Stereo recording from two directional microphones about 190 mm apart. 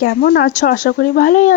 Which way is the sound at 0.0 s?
50° left (ahead or behind).